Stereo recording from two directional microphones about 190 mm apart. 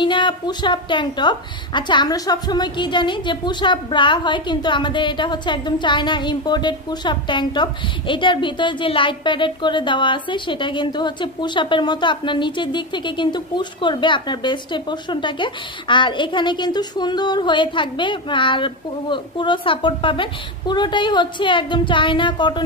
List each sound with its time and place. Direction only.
0.0 s a woman's voice: 25° left (ahead or behind)